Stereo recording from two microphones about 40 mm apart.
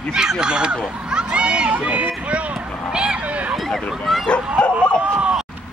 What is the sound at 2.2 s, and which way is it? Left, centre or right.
Vehicle, right.